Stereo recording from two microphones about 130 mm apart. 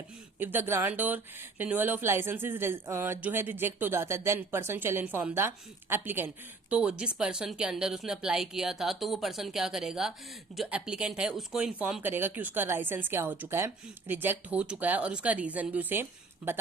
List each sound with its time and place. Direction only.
0.3 s speech: 15° right (ahead or behind)